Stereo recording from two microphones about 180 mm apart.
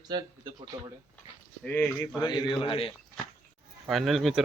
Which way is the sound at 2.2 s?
25° left (ahead or behind).